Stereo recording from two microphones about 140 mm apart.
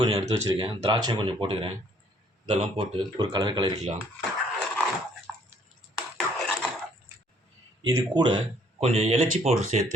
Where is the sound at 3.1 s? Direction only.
30° right (ahead or behind).